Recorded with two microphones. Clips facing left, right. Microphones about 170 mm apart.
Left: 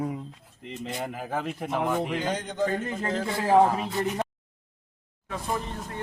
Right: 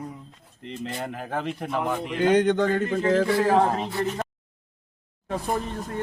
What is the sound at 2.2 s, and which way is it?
Speech, 70° right (ahead or behind).